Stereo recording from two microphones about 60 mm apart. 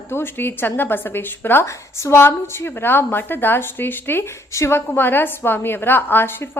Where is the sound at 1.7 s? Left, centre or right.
Left.